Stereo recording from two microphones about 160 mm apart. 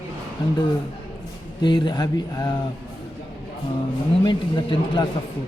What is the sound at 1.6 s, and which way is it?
Speech, 30° left (ahead or behind).